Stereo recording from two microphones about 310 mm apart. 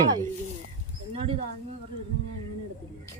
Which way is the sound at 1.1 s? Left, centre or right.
Centre.